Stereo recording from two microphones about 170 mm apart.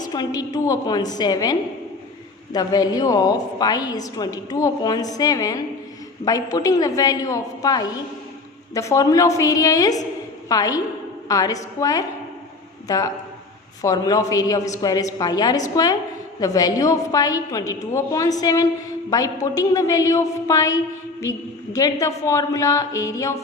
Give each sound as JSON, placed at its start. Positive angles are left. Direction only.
{"t": 0.0, "sound": "a woman's voice", "side_deg": 25}
{"t": 13.8, "sound": "a woman's voice", "side_deg": 20}